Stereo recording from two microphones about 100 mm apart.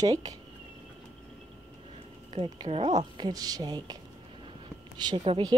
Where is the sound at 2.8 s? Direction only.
50° right (ahead or behind).